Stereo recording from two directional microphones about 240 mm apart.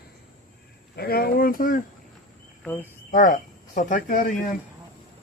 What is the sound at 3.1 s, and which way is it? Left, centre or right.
Speech, left.